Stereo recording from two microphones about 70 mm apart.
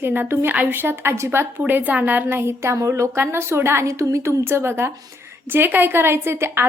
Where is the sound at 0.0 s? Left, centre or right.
Right.